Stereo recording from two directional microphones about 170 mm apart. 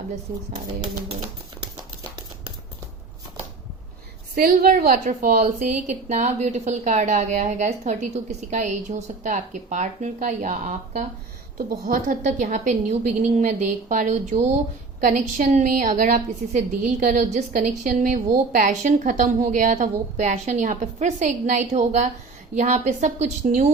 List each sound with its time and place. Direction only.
4.4 s a woman's voice: 60° right (ahead or behind)
11.5 s a woman's voice: 55° right (ahead or behind)